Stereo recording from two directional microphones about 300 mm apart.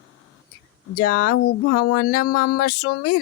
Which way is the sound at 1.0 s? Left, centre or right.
Left.